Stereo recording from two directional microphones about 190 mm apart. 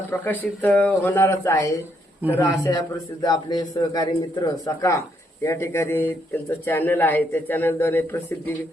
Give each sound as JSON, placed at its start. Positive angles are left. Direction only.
{"t": 0.1, "sound": "a man's voice", "side_deg": 10}